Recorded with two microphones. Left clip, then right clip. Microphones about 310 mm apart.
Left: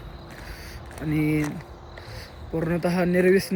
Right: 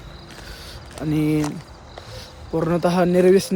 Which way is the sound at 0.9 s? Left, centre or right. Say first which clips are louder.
Right 4 dB; centre.